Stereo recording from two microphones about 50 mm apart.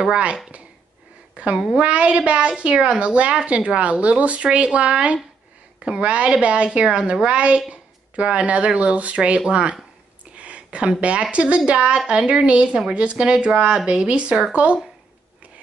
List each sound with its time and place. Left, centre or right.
1.3 s a woman's voice: right
10.3 s a sound: right
11.3 s speech: right